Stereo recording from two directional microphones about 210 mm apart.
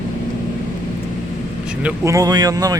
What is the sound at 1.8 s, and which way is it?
Speech, 15° right (ahead or behind).